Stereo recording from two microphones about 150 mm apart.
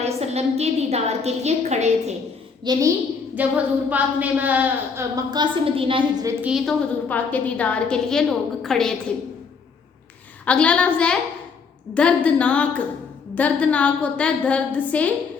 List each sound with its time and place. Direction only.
0.0 s a woman's voice: 45° right (ahead or behind)
2.7 s a woman's voice: 30° right (ahead or behind)
3.3 s a woman's voice: 10° right (ahead or behind)
5.1 s a woman's voice: 30° right (ahead or behind)
6.4 s a woman's voice: 5° right (ahead or behind)
7.1 s a woman's voice: 10° left (ahead or behind)
10.4 s a woman's voice: 10° left (ahead or behind)